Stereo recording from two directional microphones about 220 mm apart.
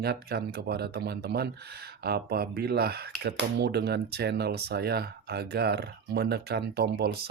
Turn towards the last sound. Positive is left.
turn(degrees=-45)  # may be behind; listen again after turning